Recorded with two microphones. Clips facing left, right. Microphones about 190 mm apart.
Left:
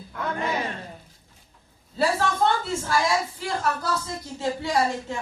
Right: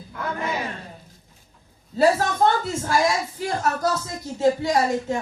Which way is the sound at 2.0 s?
45° right (ahead or behind).